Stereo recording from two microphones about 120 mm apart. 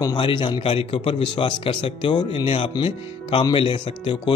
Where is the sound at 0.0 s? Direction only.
40° left (ahead or behind).